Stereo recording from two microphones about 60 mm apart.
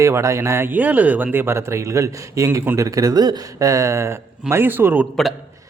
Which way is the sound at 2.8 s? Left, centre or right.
Right.